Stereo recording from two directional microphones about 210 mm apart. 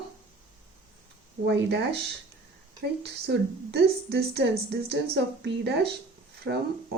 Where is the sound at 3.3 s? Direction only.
50° right (ahead or behind).